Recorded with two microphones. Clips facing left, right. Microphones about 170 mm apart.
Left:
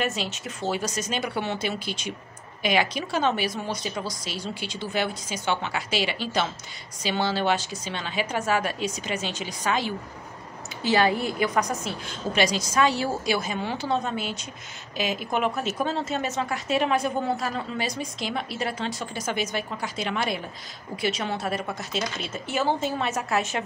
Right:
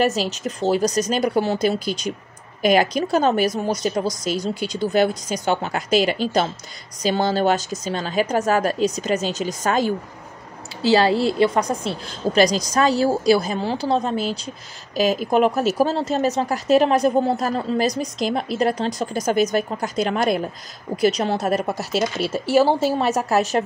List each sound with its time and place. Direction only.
0.0 s a woman's voice: 40° right (ahead or behind)
10.9 s a woman's voice: 30° right (ahead or behind)
21.7 s speech: 5° right (ahead or behind)
22.3 s a woman's voice: 35° right (ahead or behind)